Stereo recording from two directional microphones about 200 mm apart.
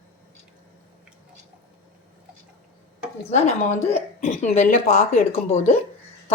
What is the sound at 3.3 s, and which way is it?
Speech, 35° left (ahead or behind).